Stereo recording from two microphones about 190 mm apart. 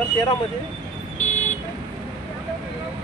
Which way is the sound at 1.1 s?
40° left (ahead or behind).